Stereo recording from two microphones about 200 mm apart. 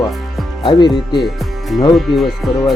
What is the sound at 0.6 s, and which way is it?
Speech, 20° left (ahead or behind).